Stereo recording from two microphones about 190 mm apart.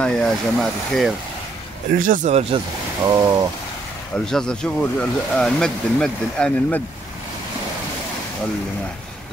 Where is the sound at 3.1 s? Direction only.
20° right (ahead or behind).